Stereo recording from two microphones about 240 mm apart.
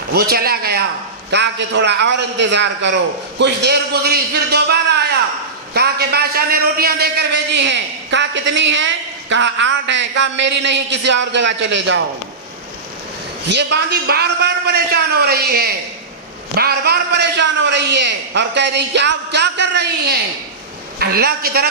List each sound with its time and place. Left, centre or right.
0.1 s a man's voice: right
13.5 s a man's voice: right